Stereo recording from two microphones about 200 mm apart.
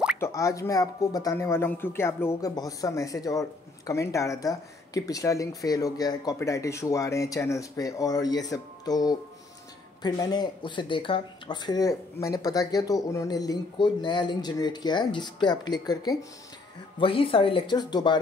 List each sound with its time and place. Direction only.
0.2 s speech: 15° left (ahead or behind)